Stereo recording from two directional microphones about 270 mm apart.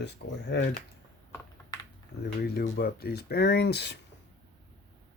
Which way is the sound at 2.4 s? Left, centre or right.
Left.